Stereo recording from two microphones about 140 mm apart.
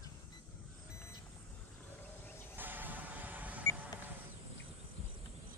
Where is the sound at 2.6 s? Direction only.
15° right (ahead or behind).